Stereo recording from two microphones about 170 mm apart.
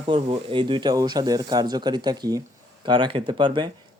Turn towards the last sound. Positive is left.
turn(degrees=-30)  # may be behind; listen again after turning